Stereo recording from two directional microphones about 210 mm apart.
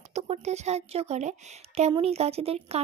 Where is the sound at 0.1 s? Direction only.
30° right (ahead or behind).